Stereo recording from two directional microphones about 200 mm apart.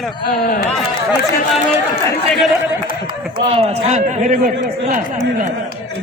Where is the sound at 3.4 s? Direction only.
30° right (ahead or behind); by 4.5 s 45° right (ahead or behind).